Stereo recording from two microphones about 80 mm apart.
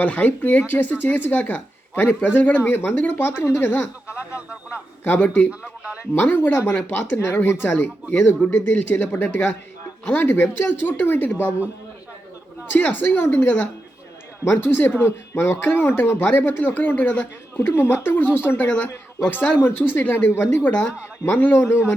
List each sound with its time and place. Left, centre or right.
0.0 s speech: left
5.5 s speech: centre
6.1 s speech: left
12.7 s speech: left